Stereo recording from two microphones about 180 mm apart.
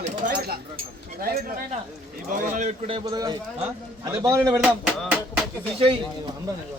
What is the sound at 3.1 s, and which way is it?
A man's voice, 20° right (ahead or behind).